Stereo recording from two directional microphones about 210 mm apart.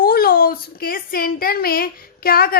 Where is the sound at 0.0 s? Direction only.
45° left (ahead or behind).